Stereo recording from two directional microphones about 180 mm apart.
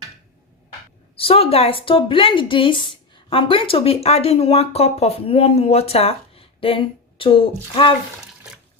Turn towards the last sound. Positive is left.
turn(degrees=30)  # may be behind; listen again after turning